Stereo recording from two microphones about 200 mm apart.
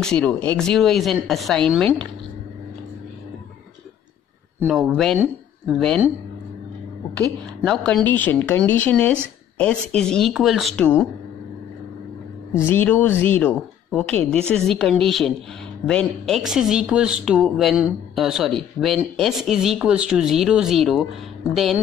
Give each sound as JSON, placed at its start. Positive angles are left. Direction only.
{"t": 0.0, "sound": "speech", "side_deg": 5}
{"t": 4.6, "sound": "a woman's voice", "side_deg": -5}
{"t": 7.2, "sound": "a woman's voice", "side_deg": 5}
{"t": 12.6, "sound": "a woman's voice", "side_deg": 10}